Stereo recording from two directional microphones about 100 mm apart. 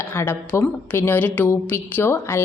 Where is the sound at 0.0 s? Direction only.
25° left (ahead or behind).